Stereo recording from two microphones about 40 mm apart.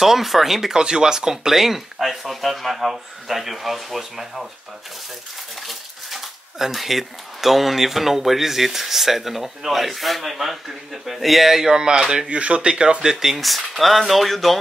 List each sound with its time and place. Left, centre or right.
0.0 s speech: centre
5.6 s speech: centre; by 13.1 s right
13.1 s speech: centre